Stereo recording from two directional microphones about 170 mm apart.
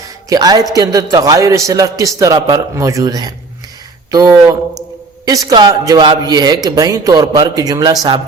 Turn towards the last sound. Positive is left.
turn(degrees=-20)  # may be behind; listen again after turning